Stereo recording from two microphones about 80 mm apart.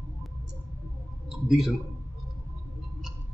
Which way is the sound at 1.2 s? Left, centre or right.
Centre.